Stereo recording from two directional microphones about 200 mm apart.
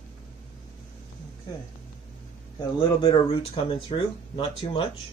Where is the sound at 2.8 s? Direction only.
25° left (ahead or behind).